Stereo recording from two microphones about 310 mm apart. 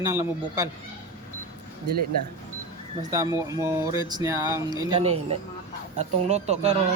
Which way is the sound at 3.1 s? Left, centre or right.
Centre.